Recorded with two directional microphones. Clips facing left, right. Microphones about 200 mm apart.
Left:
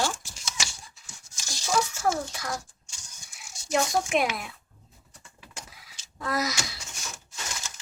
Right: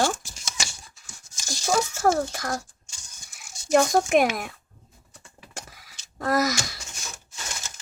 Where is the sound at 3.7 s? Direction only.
50° right (ahead or behind).